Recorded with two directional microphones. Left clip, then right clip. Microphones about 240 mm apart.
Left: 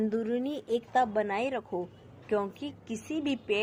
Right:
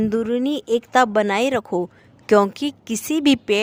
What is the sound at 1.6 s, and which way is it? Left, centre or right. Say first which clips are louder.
A woman's voice: right 12 dB; right.